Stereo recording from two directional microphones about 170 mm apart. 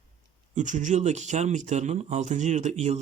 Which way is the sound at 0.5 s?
45° right (ahead or behind).